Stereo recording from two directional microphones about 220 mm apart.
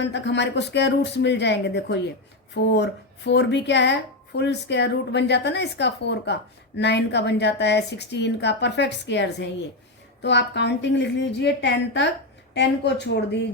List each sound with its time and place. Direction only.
0.0 s speech: 50° left (ahead or behind)